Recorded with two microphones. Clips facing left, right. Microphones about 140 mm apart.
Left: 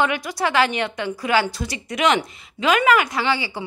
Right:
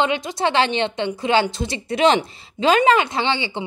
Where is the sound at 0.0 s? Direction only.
25° right (ahead or behind).